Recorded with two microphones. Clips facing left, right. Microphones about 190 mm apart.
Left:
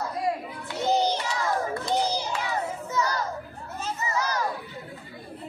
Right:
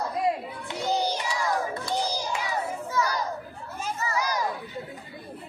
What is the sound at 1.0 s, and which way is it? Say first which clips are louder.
Child singing: left 1 dB; 15° right (ahead or behind).